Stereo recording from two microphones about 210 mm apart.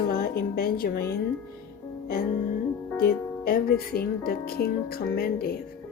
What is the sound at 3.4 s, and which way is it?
Speech, 45° left (ahead or behind).